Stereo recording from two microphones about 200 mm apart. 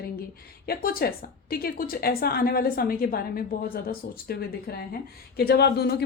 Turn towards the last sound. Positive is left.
turn(degrees=50)  # may be behind; listen again after turning